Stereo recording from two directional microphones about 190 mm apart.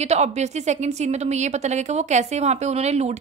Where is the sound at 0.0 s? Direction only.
35° right (ahead or behind).